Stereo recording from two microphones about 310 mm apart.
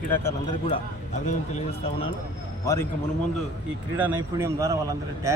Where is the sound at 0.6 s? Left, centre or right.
Left.